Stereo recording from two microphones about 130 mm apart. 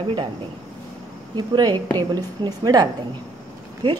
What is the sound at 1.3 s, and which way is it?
Speech, 35° right (ahead or behind).